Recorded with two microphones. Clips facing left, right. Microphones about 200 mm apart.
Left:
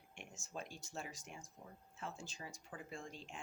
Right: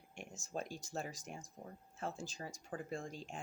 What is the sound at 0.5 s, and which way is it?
Speech, 40° right (ahead or behind).